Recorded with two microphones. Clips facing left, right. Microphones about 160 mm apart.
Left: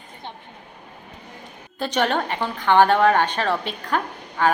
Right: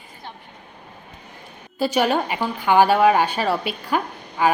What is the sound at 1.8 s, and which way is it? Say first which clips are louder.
A woman's voice: right 3 dB; 5° right (ahead or behind).